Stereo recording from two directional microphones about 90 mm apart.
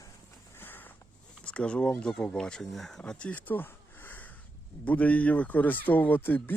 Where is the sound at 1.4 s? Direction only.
15° left (ahead or behind).